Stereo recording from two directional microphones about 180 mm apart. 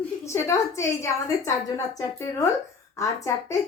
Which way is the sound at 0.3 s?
15° left (ahead or behind).